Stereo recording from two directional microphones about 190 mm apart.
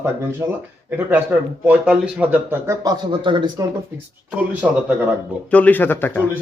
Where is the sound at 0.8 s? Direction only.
10° right (ahead or behind); by 3.7 s 25° right (ahead or behind).